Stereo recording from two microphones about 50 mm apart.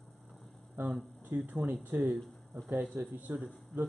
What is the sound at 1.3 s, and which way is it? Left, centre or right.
Speech, right.